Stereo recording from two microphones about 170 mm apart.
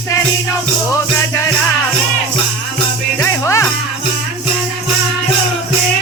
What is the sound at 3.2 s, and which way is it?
Music, 15° left (ahead or behind).